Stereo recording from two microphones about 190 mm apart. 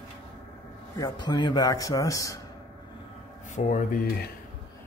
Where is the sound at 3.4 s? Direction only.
40° left (ahead or behind).